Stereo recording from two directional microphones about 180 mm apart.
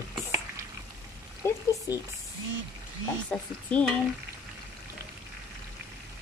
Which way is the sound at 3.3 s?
Centre (ahead or behind).